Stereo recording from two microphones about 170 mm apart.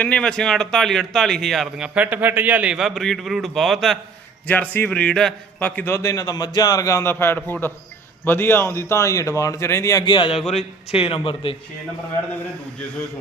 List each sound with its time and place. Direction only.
0.0 s a man's voice: 5° left (ahead or behind)
10.0 s speech: 30° left (ahead or behind)